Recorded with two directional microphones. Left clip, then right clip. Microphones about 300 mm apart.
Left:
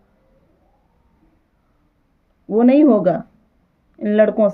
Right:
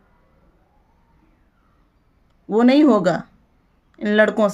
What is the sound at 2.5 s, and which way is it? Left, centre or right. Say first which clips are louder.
Speech: left 2 dB; centre.